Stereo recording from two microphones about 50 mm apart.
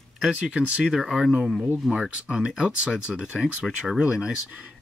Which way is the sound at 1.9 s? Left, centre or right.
Centre.